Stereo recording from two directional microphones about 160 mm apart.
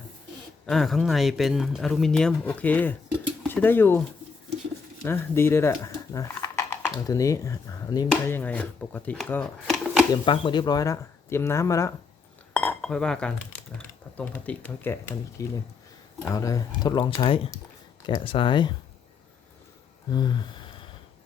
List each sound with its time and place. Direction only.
0.7 s speech: centre (ahead or behind)
5.0 s speech: 15° left (ahead or behind); by 10.1 s 5° right (ahead or behind)
10.2 s speech: 30° left (ahead or behind)
12.5 s cutlery: 5° left (ahead or behind)
13.7 s speech: 10° left (ahead or behind); by 18.7 s 30° left (ahead or behind)
20.1 s a sound: 25° left (ahead or behind)